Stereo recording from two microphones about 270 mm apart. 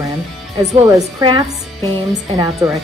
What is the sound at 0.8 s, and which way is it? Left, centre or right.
Speech, centre.